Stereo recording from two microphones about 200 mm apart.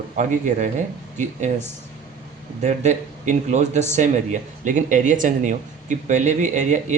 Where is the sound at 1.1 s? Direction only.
35° right (ahead or behind).